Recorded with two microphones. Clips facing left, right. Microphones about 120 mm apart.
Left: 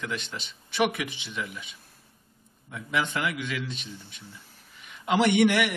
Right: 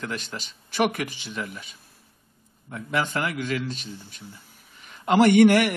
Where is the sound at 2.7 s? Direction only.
40° right (ahead or behind).